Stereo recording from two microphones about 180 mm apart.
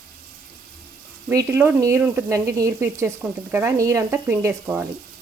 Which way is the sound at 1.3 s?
15° right (ahead or behind).